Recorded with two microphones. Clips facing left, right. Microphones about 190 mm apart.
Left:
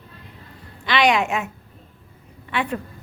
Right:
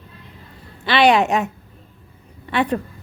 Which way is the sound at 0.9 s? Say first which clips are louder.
Right 4 dB; 35° right (ahead or behind).